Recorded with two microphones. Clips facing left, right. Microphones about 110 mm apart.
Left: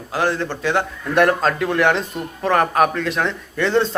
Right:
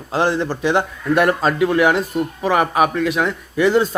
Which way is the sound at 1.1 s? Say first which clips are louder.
Even; 5° right (ahead or behind).